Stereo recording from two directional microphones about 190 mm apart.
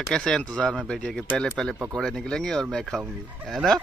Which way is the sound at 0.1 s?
5° left (ahead or behind).